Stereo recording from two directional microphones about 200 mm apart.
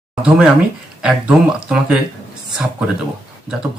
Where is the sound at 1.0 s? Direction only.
5° right (ahead or behind).